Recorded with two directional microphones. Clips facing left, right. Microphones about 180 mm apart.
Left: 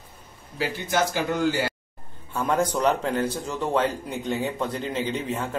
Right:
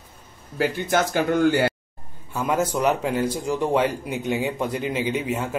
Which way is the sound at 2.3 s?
5° right (ahead or behind).